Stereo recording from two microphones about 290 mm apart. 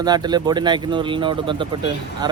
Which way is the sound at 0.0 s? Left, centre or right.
Centre.